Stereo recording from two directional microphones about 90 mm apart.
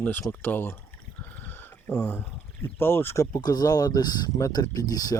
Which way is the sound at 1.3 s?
20° left (ahead or behind).